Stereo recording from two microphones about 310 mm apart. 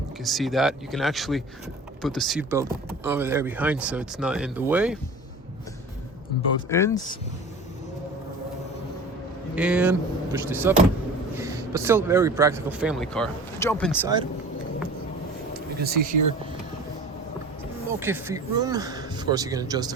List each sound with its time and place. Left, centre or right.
0.3 s speech: centre
6.7 s speech: centre
9.6 s speech: centre
15.5 s a sound: right
18.0 s speech: centre